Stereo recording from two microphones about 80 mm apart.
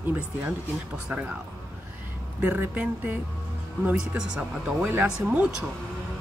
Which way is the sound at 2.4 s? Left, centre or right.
Right.